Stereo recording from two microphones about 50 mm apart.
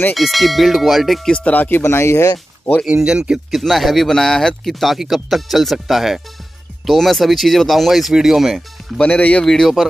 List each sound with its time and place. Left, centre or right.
0.1 s speech: centre
1.4 s speech: left
1.8 s speech: left
2.9 s speech: centre
3.5 s speech: centre
9.0 s speech: left
9.4 s a man's voice: centre